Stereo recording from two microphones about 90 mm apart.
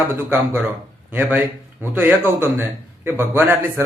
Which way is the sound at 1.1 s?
20° right (ahead or behind).